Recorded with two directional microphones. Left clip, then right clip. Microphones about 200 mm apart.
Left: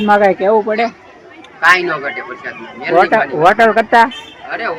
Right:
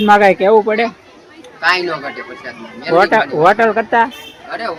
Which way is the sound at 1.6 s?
25° right (ahead or behind).